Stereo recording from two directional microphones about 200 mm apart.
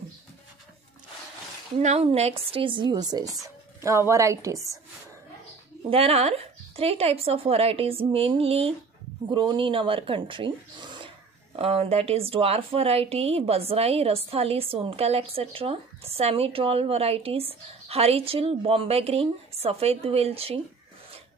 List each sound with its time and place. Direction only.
1.8 s a woman's voice: 35° right (ahead or behind); by 4.7 s 15° right (ahead or behind)
5.9 s a woman's voice: 30° right (ahead or behind)